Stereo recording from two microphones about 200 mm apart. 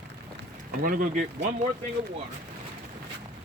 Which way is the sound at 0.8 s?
45° right (ahead or behind).